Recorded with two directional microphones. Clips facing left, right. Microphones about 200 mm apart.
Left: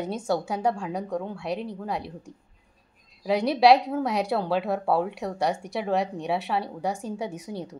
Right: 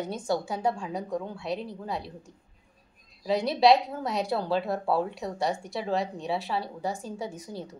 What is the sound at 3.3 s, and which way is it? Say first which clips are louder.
Speech: left 3 dB; 10° left (ahead or behind).